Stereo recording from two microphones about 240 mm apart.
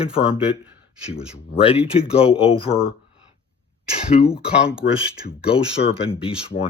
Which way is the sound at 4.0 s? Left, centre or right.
Left.